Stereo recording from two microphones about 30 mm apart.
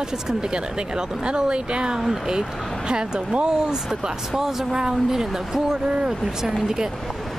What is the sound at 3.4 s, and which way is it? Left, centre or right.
Speech, right.